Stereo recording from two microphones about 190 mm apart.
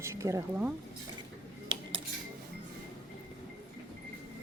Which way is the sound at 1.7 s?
25° right (ahead or behind).